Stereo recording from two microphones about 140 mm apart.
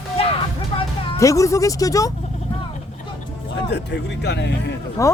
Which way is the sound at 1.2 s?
25° left (ahead or behind).